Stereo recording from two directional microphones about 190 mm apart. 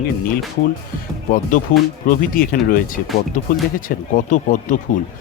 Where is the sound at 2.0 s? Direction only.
50° left (ahead or behind).